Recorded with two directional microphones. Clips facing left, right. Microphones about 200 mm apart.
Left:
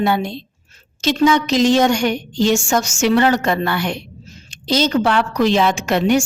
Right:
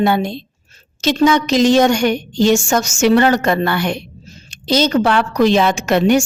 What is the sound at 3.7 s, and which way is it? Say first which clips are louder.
Speech: right 3 dB; 65° right (ahead or behind).